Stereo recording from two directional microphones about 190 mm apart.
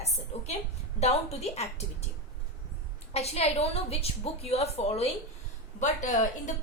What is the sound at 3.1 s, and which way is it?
A woman's voice, 35° left (ahead or behind).